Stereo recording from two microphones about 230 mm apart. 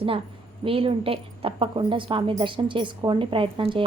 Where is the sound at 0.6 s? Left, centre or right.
Right.